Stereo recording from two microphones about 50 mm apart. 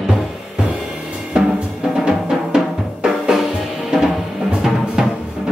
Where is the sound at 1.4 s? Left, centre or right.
Centre.